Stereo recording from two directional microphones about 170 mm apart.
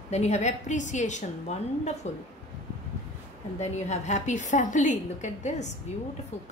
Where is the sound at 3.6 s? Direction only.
40° left (ahead or behind).